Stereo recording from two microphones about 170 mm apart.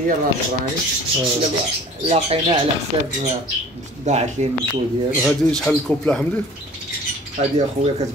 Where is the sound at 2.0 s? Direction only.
35° right (ahead or behind).